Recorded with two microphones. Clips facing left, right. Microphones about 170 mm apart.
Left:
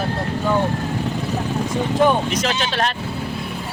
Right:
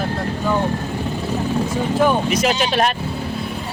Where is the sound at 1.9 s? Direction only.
5° right (ahead or behind).